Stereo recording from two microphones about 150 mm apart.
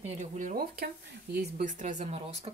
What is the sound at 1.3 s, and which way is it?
Speech, 90° right.